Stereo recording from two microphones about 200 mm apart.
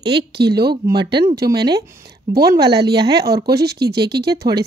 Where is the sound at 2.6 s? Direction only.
55° right (ahead or behind).